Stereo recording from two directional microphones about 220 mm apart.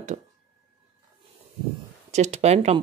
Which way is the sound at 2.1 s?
30° right (ahead or behind).